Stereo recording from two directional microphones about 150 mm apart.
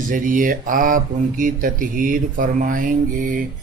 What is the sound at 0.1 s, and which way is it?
Speech, 65° right (ahead or behind).